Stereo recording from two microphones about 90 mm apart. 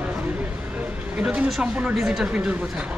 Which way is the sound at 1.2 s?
15° right (ahead or behind).